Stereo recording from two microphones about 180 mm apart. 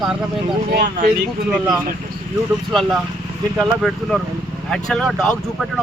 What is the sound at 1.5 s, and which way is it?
Speech, 5° right (ahead or behind).